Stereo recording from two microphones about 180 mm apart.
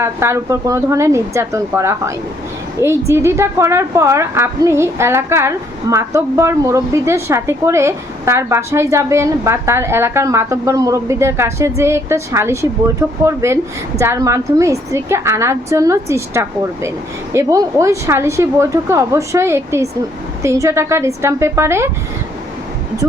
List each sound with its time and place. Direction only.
0.0 s a woman's voice: 15° right (ahead or behind)